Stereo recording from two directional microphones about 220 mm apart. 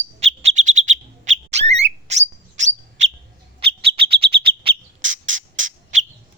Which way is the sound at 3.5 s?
25° right (ahead or behind).